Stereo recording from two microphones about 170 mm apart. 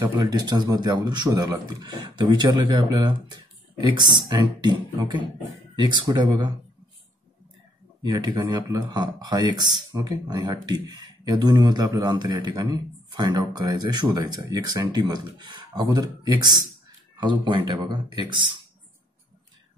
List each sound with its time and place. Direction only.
0.3 s speech: 25° right (ahead or behind)
8.0 s speech: 25° right (ahead or behind)